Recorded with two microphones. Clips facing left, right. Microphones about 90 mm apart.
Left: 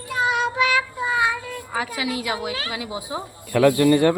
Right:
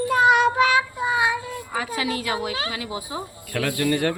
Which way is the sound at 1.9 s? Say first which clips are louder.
Even; 10° left (ahead or behind).